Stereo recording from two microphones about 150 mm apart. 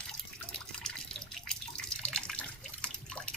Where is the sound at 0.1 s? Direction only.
5° left (ahead or behind).